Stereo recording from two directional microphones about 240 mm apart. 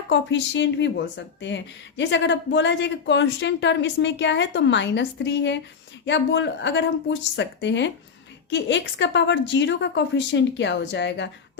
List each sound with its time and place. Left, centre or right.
0.1 s speech: left